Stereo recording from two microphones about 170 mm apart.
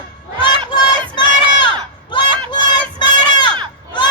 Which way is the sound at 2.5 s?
25° left (ahead or behind).